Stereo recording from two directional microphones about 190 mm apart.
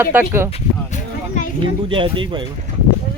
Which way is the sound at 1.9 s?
25° right (ahead or behind).